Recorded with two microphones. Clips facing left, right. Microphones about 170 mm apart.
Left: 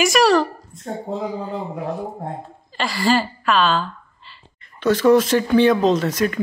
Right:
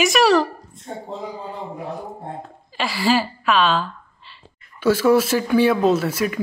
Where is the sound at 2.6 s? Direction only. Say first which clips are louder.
Left 1 dB; 5° right (ahead or behind).